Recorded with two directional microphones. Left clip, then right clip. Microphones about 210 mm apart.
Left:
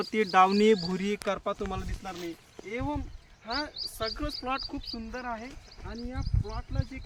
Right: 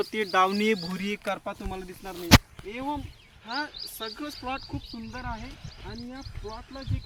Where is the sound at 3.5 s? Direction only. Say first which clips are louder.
Right 1 dB; 35° left (ahead or behind).